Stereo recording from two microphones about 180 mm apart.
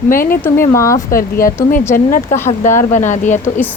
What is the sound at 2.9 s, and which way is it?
Speech, 45° left (ahead or behind).